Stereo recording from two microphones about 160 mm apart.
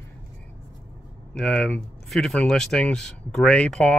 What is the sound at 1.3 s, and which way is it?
Speech, 5° left (ahead or behind).